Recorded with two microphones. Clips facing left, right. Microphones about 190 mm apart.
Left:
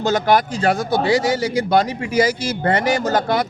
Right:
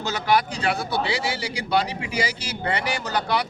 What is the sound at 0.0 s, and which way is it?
Speech, 45° left (ahead or behind).